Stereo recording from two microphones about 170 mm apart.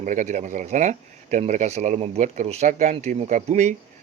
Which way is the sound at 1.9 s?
35° right (ahead or behind).